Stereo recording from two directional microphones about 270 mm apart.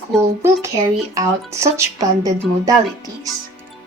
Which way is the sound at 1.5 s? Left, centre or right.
Centre.